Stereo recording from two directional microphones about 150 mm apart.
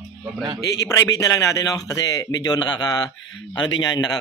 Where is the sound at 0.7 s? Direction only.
25° left (ahead or behind).